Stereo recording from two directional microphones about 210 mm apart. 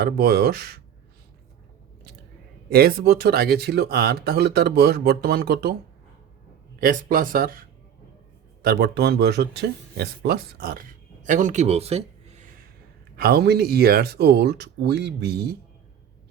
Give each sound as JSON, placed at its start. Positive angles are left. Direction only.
{"t": 0.0, "sound": "speech", "side_deg": -45}
{"t": 2.7, "sound": "speech", "side_deg": -45}
{"t": 6.7, "sound": "speech", "side_deg": -40}
{"t": 8.6, "sound": "speech", "side_deg": -50}
{"t": 13.1, "sound": "speech", "side_deg": -50}